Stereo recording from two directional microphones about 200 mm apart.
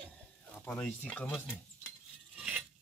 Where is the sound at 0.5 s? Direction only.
10° left (ahead or behind).